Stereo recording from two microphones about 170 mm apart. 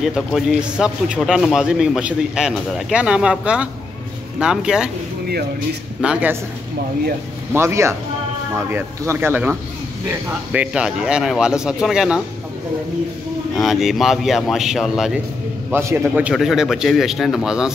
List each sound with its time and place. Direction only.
0.0 s a man's voice: centre (ahead or behind)
5.9 s speech: 5° right (ahead or behind)
7.5 s a man's voice: 15° right (ahead or behind)
13.6 s a man's voice: centre (ahead or behind)
15.7 s a man's voice: 15° right (ahead or behind)